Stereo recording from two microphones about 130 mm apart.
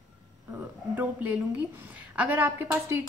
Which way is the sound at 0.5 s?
15° right (ahead or behind).